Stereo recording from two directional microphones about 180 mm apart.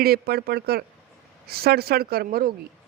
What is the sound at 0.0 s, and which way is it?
Speech, 60° right (ahead or behind).